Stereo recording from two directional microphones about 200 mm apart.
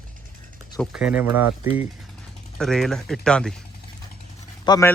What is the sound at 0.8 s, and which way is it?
Speech, 5° right (ahead or behind).